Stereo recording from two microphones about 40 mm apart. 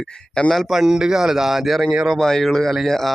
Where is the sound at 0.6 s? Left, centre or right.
Centre.